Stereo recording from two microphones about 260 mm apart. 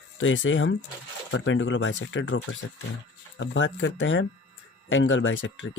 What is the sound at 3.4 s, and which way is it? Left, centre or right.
Speech, left.